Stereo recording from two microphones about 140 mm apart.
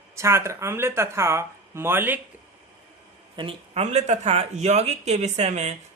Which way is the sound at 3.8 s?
55° right (ahead or behind).